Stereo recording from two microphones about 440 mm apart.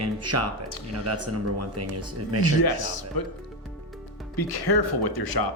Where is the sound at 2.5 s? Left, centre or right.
Left.